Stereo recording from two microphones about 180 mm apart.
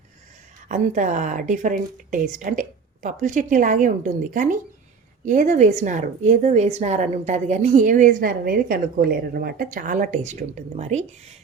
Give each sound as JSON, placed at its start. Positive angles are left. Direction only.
{"t": 0.7, "sound": "a woman's voice", "side_deg": -45}